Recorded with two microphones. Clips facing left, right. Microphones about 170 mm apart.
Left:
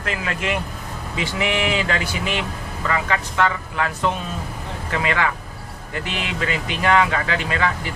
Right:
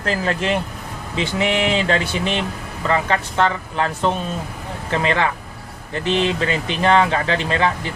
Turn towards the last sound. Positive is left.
turn(degrees=-30)  # may be behind; listen again after turning